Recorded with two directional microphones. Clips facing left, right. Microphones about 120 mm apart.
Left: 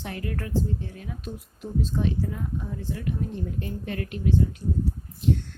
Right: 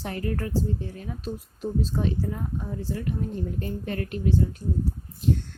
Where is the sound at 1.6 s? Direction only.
35° right (ahead or behind).